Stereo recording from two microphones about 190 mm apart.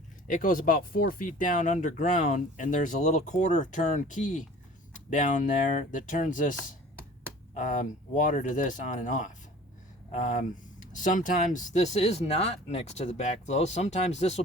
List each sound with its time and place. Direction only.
0.3 s speech: 45° left (ahead or behind)